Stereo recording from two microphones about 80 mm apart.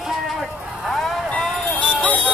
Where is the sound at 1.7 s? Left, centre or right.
Centre.